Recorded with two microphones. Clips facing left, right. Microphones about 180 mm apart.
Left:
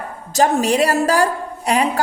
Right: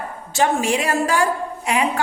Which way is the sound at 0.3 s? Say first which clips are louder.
Left 3 dB; 40° left (ahead or behind).